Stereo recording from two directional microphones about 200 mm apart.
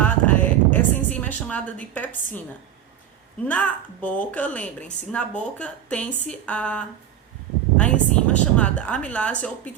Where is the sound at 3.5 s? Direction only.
5° left (ahead or behind).